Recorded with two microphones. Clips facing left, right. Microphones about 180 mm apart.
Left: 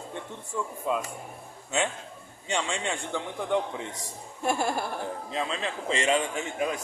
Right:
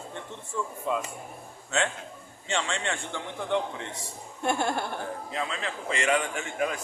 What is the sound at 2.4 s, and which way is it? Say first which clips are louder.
Speech: even; 15° left (ahead or behind).